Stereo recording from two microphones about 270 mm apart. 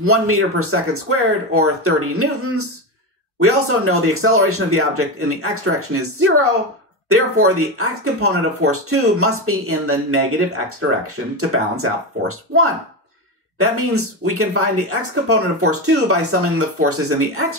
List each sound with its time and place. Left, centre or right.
0.0 s speech: right